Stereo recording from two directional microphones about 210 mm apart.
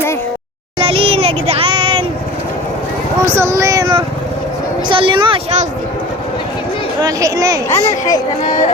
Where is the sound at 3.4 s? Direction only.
15° right (ahead or behind); by 5.7 s 30° right (ahead or behind).